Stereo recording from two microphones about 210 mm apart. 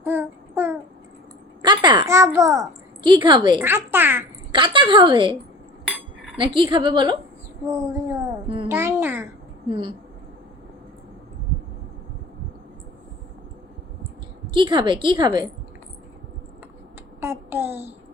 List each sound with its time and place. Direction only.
0.0 s child singing: 10° right (ahead or behind)
1.6 s a child's voice: 20° right (ahead or behind)
3.6 s a child's voice: 10° right (ahead or behind)
4.5 s a woman's voice: 25° right (ahead or behind)
7.9 s a sound: 15° right (ahead or behind)
8.7 s babbling: 10° right (ahead or behind)
9.6 s a woman's voice: 25° right (ahead or behind)
14.5 s a woman's voice: 25° right (ahead or behind)
17.2 s a child's voice: 10° right (ahead or behind)